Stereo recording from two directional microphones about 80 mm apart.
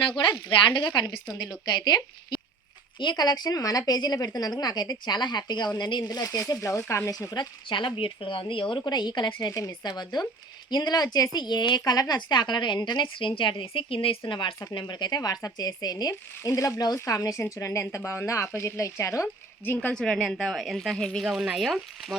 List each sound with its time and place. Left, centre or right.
0.2 s a woman's voice: left
1.6 s a woman's voice: left
7.1 s speech: left
7.3 s speech: left
9.5 s a woman's voice: left
11.3 s a woman's voice: left
14.6 s a woman's voice: left
19.6 s a woman's voice: left
19.9 s speech: centre
21.2 s speech: centre